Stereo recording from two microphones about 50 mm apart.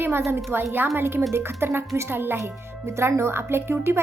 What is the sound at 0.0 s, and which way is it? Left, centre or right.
Speech, right.